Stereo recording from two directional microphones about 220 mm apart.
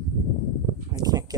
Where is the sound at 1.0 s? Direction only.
15° right (ahead or behind).